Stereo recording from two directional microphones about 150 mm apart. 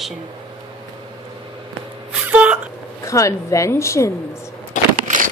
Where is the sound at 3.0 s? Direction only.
20° left (ahead or behind).